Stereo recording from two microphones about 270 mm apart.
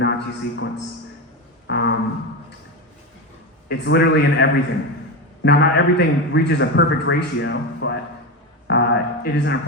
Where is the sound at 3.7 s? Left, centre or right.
Left.